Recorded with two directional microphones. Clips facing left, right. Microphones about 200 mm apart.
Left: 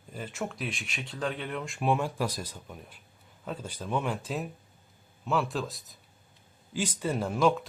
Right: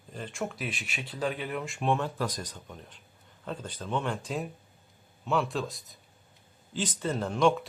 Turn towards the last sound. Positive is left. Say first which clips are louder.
# even
turn(degrees=0)  # may be behind; listen again after turning